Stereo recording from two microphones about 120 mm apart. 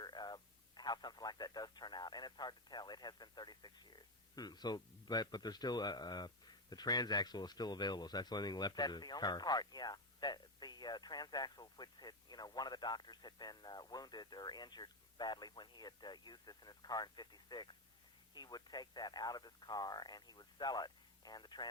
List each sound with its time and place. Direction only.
0.0 s speech: 35° left (ahead or behind)